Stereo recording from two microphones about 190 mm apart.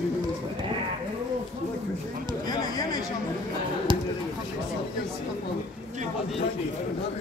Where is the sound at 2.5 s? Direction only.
20° left (ahead or behind).